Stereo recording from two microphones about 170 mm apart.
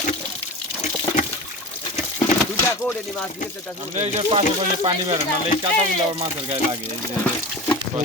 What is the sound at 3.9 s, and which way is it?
Speech, 35° right (ahead or behind).